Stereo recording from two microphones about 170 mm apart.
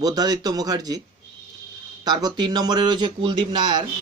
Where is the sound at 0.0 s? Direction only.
25° right (ahead or behind).